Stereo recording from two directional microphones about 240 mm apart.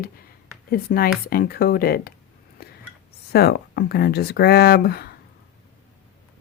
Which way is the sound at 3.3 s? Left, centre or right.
Left.